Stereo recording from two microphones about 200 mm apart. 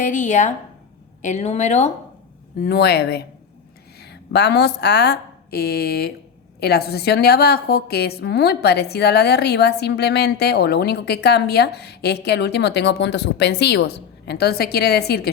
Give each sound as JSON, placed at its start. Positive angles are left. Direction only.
{"t": 0.0, "sound": "a woman's voice", "side_deg": 40}
{"t": 2.6, "sound": "a woman's voice", "side_deg": 50}